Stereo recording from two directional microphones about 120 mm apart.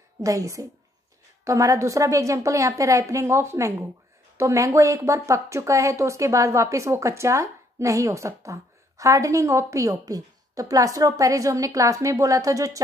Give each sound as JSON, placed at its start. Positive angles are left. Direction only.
{"t": 0.2, "sound": "speech", "side_deg": -25}